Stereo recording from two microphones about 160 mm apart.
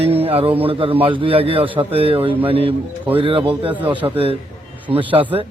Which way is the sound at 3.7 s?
10° right (ahead or behind).